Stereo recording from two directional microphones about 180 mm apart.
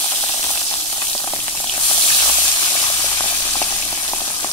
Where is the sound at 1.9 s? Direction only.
20° left (ahead or behind).